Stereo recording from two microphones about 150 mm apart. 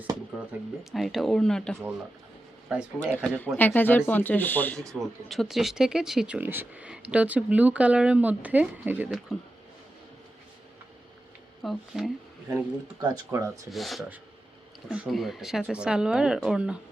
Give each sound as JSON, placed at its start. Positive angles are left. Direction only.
{"t": 0.9, "sound": "speech", "side_deg": 0}
{"t": 3.2, "sound": "speech", "side_deg": 10}
{"t": 4.9, "sound": "speech", "side_deg": 0}
{"t": 11.6, "sound": "speech", "side_deg": 0}
{"t": 12.5, "sound": "speech", "side_deg": -15}
{"t": 13.7, "sound": "speech", "side_deg": 0}